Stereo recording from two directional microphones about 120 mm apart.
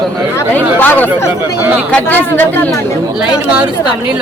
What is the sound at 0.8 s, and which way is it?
Speech, 15° left (ahead or behind).